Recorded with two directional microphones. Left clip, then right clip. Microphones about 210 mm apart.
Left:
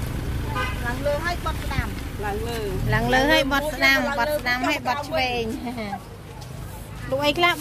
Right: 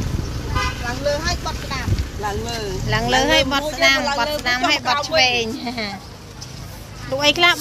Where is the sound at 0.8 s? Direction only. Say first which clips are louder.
Right 2 dB; 20° right (ahead or behind).